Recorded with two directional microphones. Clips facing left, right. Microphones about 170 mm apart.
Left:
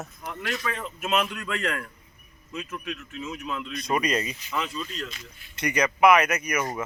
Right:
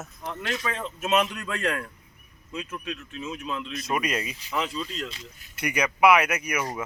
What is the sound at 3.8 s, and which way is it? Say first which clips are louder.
Speech: left 3 dB; 5° right (ahead or behind).